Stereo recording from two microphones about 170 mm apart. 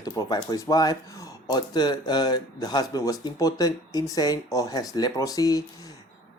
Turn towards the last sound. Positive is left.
turn(degrees=20)  # may be behind; listen again after turning